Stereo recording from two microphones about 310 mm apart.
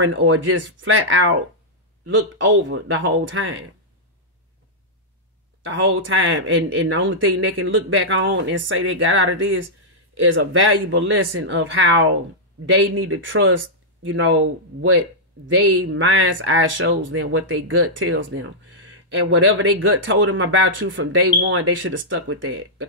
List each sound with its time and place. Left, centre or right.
0.0 s speech: right
5.7 s speech: right